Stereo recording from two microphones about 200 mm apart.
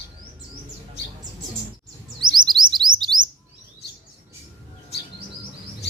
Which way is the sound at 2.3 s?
20° right (ahead or behind).